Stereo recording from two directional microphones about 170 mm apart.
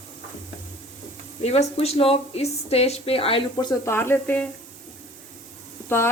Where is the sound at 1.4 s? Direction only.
40° left (ahead or behind); by 4.5 s 10° left (ahead or behind).